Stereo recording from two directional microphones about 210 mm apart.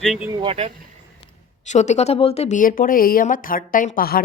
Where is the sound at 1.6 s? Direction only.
35° left (ahead or behind).